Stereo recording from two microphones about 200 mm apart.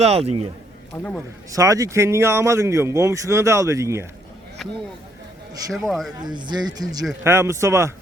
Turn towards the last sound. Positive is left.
turn(degrees=-15)  # may be behind; listen again after turning